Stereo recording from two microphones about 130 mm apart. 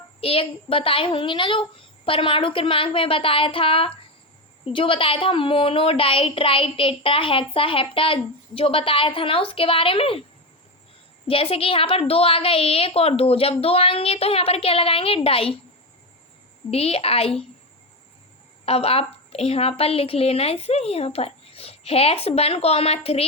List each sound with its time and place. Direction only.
0.2 s a woman's voice: 45° left (ahead or behind)
11.3 s a woman's voice: 45° left (ahead or behind)
16.7 s a woman's voice: 50° left (ahead or behind)
18.6 s a woman's voice: 50° left (ahead or behind)